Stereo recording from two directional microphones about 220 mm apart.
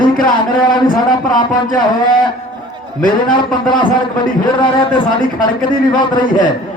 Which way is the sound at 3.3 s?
20° left (ahead or behind).